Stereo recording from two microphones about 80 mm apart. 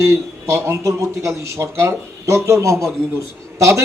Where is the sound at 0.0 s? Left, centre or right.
Right.